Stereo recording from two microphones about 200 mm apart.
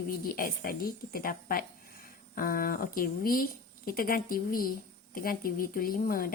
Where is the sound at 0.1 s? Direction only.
45° left (ahead or behind).